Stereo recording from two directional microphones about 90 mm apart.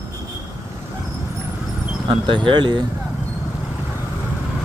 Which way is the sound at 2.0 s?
65° right (ahead or behind).